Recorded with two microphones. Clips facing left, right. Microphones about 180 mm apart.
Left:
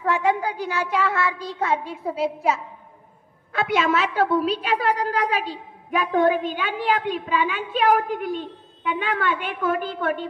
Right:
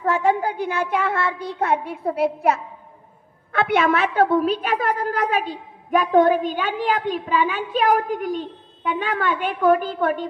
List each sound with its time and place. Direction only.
0.0 s child singing: 45° right (ahead or behind)
3.5 s a woman's voice: 60° right (ahead or behind); by 10.2 s 40° right (ahead or behind)